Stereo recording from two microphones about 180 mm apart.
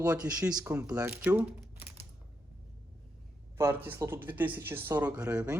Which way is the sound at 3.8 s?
10° right (ahead or behind).